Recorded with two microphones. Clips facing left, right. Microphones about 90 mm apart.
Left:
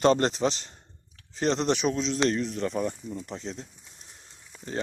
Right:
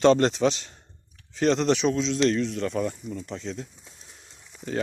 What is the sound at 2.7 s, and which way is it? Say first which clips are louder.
Speech: right 2 dB; 10° left (ahead or behind).